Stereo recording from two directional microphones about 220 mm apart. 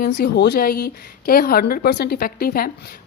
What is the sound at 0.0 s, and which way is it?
A woman's voice, 50° left (ahead or behind).